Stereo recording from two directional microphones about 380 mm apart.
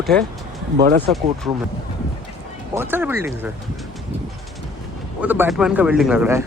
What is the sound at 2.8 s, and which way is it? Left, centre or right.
Speech, centre.